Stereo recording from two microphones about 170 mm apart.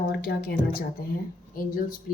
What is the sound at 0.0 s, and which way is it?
A woman's voice, 60° left (ahead or behind).